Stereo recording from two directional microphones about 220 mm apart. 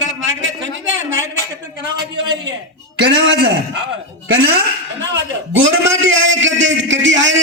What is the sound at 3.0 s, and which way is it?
Speech, 50° right (ahead or behind).